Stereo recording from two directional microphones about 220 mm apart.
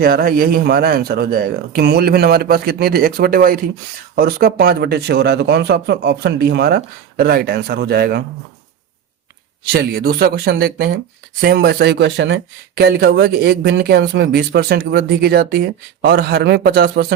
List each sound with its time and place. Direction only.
0.0 s speech: 45° right (ahead or behind)
9.7 s speech: 45° right (ahead or behind)